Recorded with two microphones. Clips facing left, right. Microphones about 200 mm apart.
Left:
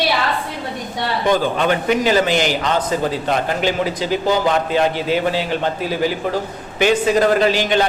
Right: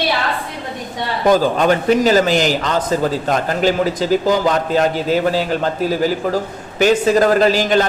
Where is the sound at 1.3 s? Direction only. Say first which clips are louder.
Right 4 dB; 40° right (ahead or behind).